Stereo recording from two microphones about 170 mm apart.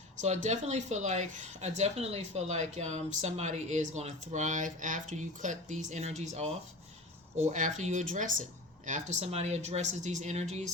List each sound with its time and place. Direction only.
0.4 s speech: 45° right (ahead or behind)